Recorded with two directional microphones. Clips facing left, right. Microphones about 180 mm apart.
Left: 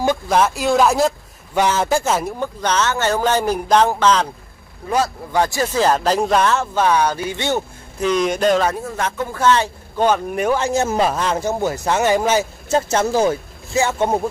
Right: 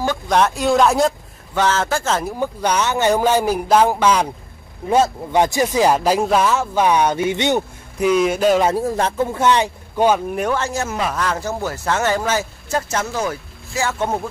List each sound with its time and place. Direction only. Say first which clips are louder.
0.3 s speech: right 2 dB; centre (ahead or behind)
1.5 s a man's voice: left 2 dB; 15° left (ahead or behind)
2.2 s speech: right 1 dB; 10° right (ahead or behind)
4.8 s speech: right 4 dB; 20° right (ahead or behind); by 8.6 s 5° right (ahead or behind)
8.7 s speech: right 5 dB; 35° right (ahead or behind); by 10.4 s 10° right (ahead or behind)
10.4 s a man's voice: left 2 dB; 10° left (ahead or behind)
10.7 s speech: left 5 dB; 30° left (ahead or behind)